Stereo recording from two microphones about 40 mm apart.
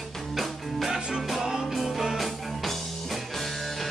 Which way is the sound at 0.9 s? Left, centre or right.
Centre.